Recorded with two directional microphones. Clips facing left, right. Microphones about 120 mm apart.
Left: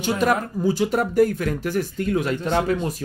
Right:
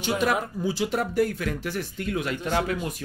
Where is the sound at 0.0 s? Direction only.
45° left (ahead or behind).